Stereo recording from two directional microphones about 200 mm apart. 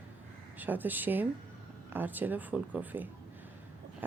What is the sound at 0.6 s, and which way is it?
Speech, 10° right (ahead or behind).